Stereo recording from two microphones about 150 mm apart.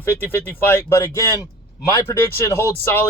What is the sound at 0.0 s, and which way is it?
Speech, 15° left (ahead or behind).